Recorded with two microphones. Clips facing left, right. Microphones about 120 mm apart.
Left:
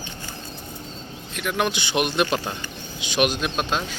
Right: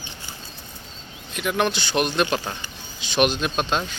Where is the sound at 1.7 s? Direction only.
15° left (ahead or behind).